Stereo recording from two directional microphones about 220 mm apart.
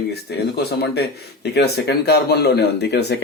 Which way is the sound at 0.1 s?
45° left (ahead or behind).